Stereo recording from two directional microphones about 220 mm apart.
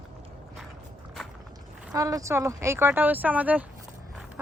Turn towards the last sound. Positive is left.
turn(degrees=-5)  # may be behind; listen again after turning